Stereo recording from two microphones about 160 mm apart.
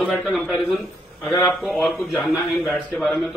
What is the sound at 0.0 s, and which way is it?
Speech, centre (ahead or behind).